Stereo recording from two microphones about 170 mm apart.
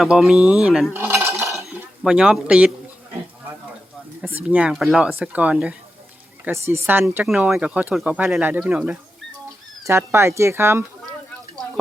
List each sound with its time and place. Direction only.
0.0 s speech: 5° right (ahead or behind)
1.0 s cutlery: 15° right (ahead or behind)
1.5 s dishes: centre (ahead or behind)
4.2 s speech: 10° right (ahead or behind)